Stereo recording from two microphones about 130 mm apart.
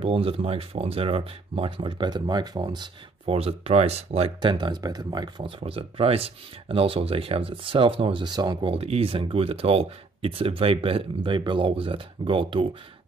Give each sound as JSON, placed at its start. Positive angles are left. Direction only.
{"t": 0.0, "sound": "speech", "side_deg": -45}
{"t": 3.3, "sound": "speech", "side_deg": -50}
{"t": 4.4, "sound": "speech", "side_deg": -40}
{"t": 8.7, "sound": "speech", "side_deg": -50}